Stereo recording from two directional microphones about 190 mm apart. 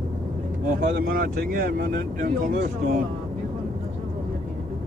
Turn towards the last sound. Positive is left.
turn(degrees=-55)  # may be behind; listen again after turning